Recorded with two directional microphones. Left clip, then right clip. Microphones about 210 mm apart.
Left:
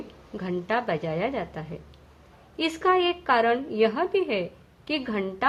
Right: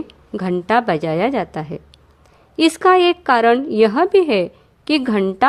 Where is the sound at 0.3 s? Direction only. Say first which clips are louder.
Right 10 dB; 50° right (ahead or behind).